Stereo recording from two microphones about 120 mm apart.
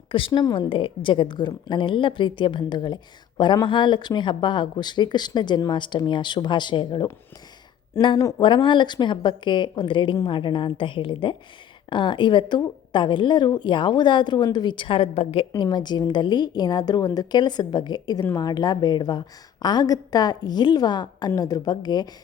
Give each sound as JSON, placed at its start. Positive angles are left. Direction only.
{"t": 0.1, "sound": "a woman's voice", "side_deg": 45}
{"t": 8.4, "sound": "a woman's voice", "side_deg": 45}
{"t": 15.5, "sound": "a woman's voice", "side_deg": 35}